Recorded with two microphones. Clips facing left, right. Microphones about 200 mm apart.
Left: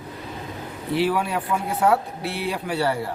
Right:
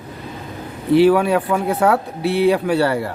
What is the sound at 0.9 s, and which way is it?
Speech, 70° right (ahead or behind).